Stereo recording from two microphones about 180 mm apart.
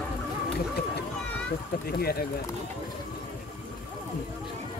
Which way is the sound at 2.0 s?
60° left (ahead or behind).